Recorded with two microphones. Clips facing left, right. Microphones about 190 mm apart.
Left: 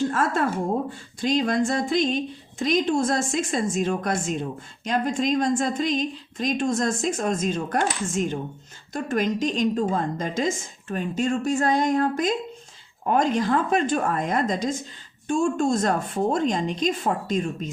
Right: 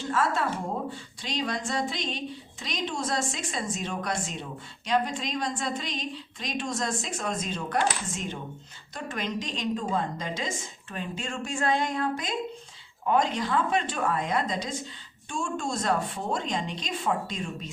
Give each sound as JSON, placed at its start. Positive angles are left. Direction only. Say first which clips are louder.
{"t": 0.1, "sound": "a woman's voice", "louder": "left 3 dB", "side_deg": 50}